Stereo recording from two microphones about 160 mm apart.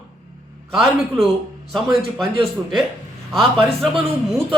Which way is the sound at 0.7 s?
Centre (ahead or behind).